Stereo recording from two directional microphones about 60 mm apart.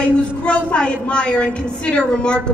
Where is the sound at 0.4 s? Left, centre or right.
Centre.